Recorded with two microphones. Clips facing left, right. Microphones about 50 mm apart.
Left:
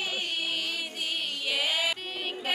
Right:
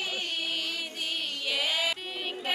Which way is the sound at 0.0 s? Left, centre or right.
Left.